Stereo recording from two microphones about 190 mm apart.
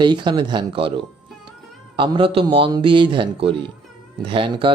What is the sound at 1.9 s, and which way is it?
Speech, 25° right (ahead or behind).